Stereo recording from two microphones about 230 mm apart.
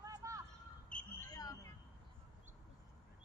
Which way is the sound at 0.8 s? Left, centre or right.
Centre.